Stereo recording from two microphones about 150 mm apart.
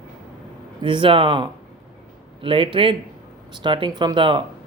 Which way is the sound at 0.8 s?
35° right (ahead or behind).